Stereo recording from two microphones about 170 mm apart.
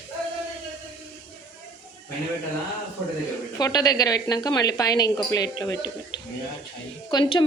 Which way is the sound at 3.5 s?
20° left (ahead or behind).